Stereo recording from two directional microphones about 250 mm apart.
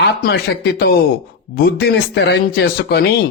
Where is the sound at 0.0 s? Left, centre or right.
Left.